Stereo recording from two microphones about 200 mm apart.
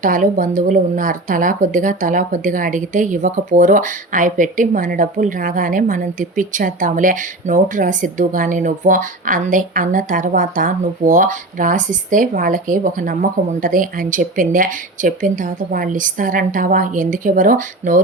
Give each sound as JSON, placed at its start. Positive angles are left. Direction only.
{"t": 0.0, "sound": "speech", "side_deg": -40}